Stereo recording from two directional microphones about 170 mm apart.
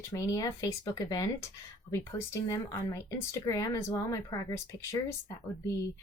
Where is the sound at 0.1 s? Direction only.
20° left (ahead or behind).